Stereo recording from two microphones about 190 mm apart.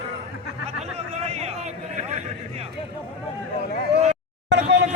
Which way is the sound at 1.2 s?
35° right (ahead or behind).